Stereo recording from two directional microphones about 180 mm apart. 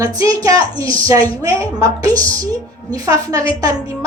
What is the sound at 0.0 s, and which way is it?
A woman's voice, 20° right (ahead or behind).